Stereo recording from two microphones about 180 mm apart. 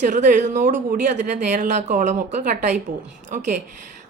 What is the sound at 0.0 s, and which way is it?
Speech, 45° right (ahead or behind).